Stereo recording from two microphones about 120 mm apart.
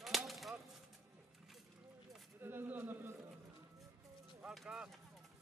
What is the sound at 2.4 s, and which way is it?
Pigeon, 20° right (ahead or behind).